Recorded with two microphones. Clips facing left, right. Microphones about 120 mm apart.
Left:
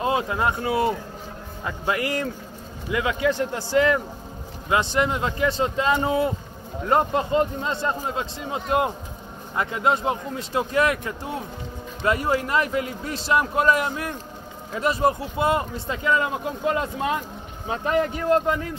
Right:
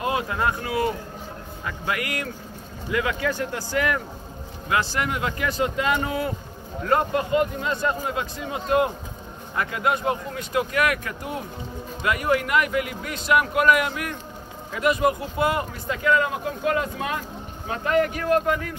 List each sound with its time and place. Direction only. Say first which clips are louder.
0.0 s speech: left 2 dB; 25° left (ahead or behind)